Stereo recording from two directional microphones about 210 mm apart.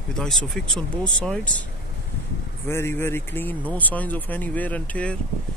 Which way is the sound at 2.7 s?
10° left (ahead or behind).